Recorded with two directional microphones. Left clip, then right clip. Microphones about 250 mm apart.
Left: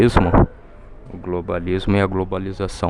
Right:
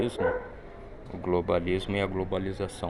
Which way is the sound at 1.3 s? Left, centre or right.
Centre.